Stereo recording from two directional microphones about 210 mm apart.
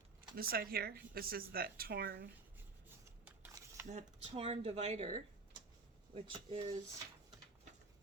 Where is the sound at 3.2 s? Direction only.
10° right (ahead or behind).